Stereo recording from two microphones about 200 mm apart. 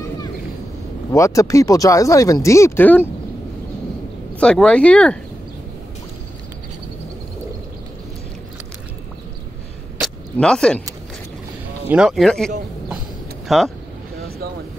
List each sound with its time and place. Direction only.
1.1 s speech: 15° left (ahead or behind)
4.4 s speech: 5° left (ahead or behind)
9.9 s vehicle: centre (ahead or behind)
11.9 s speech: centre (ahead or behind)